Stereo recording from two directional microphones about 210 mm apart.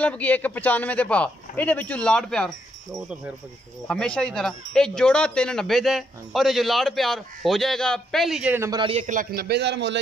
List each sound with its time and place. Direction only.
0.0 s speech: 5° left (ahead or behind); by 9.0 s 20° right (ahead or behind)
9.0 s a man's voice: 40° right (ahead or behind)